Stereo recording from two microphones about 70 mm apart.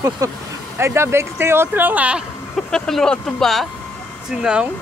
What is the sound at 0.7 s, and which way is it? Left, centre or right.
Speech, right.